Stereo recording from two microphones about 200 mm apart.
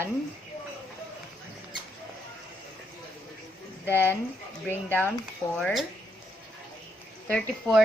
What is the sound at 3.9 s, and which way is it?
Speech, 10° left (ahead or behind).